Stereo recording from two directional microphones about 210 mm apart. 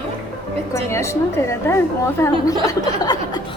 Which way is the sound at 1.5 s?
10° left (ahead or behind).